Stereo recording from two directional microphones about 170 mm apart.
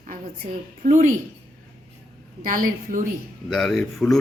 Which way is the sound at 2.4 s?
50° right (ahead or behind).